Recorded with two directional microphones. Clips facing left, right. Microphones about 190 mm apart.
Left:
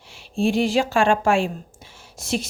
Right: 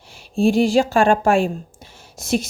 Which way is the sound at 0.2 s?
40° right (ahead or behind).